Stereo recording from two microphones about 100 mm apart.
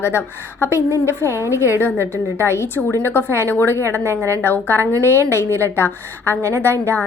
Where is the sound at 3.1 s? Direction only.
25° left (ahead or behind).